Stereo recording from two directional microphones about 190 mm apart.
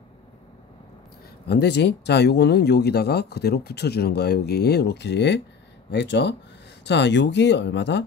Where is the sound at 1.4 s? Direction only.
60° left (ahead or behind).